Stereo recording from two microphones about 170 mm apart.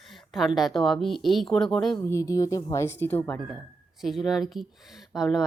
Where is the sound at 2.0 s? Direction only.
20° left (ahead or behind); by 5.4 s centre (ahead or behind).